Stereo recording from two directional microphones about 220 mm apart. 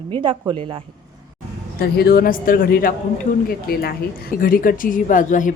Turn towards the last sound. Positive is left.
turn(degrees=35)  # may be behind; listen again after turning